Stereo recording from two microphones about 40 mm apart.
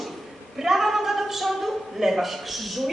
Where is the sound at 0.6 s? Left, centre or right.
Centre.